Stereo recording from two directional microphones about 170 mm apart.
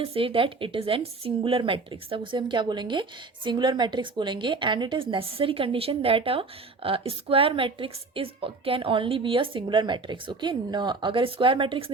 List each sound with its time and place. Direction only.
0.0 s speech: 35° right (ahead or behind)